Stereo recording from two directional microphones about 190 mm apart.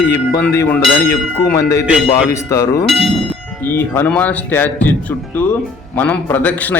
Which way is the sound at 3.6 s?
10° left (ahead or behind).